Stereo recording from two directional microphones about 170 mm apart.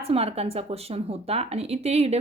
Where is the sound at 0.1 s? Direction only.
35° right (ahead or behind).